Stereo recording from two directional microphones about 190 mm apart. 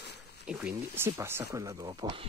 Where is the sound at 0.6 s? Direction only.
10° right (ahead or behind).